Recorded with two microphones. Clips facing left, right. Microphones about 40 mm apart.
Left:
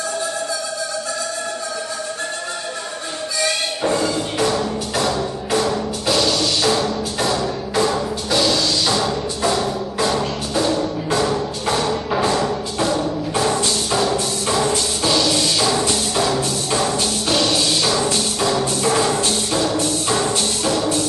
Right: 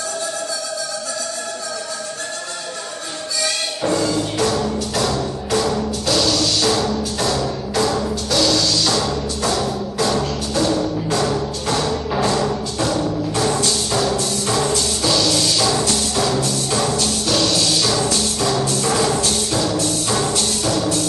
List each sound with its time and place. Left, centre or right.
3.4 s music: centre